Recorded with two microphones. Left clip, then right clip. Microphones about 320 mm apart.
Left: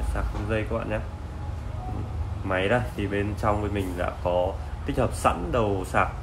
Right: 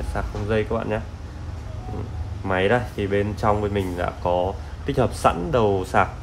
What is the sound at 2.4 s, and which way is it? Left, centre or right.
Speech, right.